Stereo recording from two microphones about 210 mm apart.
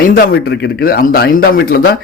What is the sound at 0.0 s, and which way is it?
Speech, 45° left (ahead or behind).